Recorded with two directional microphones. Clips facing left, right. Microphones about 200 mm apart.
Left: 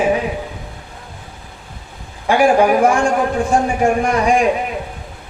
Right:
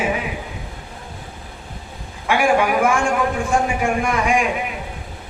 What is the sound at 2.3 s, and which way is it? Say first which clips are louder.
A man's voice: left 5 dB; 35° left (ahead or behind).